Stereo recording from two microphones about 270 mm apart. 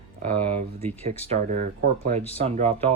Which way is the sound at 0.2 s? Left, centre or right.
Right.